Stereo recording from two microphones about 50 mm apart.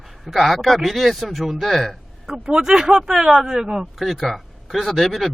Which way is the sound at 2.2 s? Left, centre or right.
Centre.